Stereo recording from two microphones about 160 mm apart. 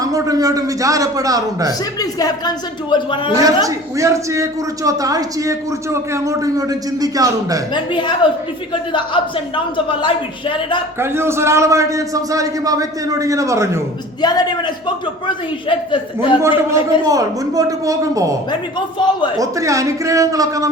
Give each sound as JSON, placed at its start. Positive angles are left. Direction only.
{"t": 0.0, "sound": "a man's voice", "side_deg": -20}
{"t": 2.0, "sound": "a woman's voice", "side_deg": 25}
{"t": 3.3, "sound": "a man's voice", "side_deg": -20}
{"t": 7.7, "sound": "a woman's voice", "side_deg": 30}
{"t": 11.0, "sound": "a man's voice", "side_deg": -15}
{"t": 14.2, "sound": "a woman's voice", "side_deg": 25}
{"t": 16.6, "sound": "a man's voice", "side_deg": -20}
{"t": 18.9, "sound": "a woman's voice", "side_deg": 30}
{"t": 19.4, "sound": "a man's voice", "side_deg": -20}